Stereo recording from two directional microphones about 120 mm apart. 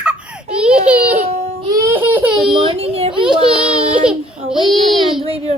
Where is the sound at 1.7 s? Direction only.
20° right (ahead or behind).